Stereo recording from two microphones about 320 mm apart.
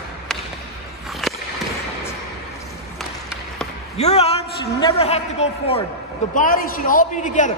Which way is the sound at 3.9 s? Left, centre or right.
Centre.